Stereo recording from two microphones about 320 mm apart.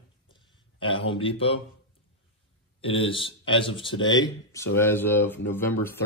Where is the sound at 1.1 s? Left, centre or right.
Centre.